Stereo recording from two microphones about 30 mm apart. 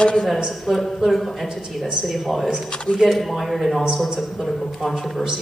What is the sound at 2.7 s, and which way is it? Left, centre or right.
Speech, left.